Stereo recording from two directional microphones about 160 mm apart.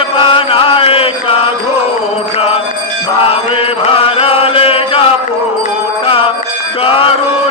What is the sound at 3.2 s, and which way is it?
Mantra, 35° left (ahead or behind).